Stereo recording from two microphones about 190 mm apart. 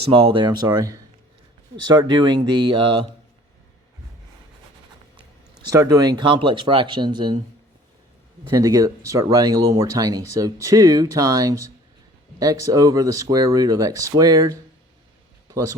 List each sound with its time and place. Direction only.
0.1 s speech: 25° right (ahead or behind)
5.6 s speech: 20° right (ahead or behind)
8.4 s speech: 20° right (ahead or behind)